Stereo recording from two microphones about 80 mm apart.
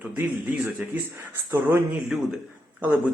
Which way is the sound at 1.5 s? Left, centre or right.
Right.